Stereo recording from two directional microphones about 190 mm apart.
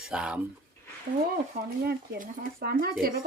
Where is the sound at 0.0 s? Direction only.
5° right (ahead or behind).